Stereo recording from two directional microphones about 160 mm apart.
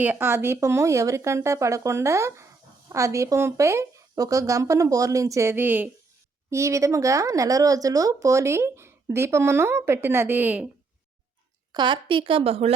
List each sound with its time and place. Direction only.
0.0 s a woman's voice: 10° right (ahead or behind)
11.7 s a woman's voice: 30° right (ahead or behind)